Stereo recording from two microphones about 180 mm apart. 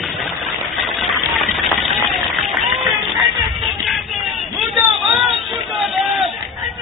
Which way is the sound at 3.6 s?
Centre (ahead or behind).